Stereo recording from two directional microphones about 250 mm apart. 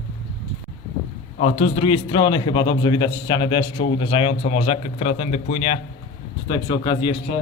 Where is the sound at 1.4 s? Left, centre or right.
Left.